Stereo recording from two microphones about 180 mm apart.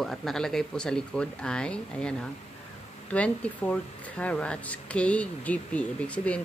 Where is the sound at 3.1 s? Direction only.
5° left (ahead or behind).